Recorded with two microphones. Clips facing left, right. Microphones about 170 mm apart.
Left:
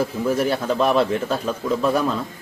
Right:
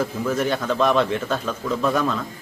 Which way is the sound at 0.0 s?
10° left (ahead or behind).